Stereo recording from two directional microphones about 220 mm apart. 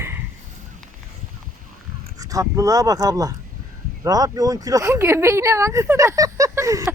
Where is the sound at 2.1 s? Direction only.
15° right (ahead or behind).